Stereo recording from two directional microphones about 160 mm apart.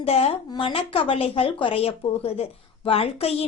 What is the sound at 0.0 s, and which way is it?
Speech, 40° left (ahead or behind).